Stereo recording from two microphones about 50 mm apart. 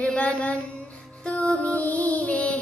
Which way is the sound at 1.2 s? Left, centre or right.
Left.